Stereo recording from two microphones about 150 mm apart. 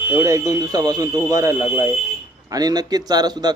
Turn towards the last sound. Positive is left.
turn(degrees=-25)  # may be behind; listen again after turning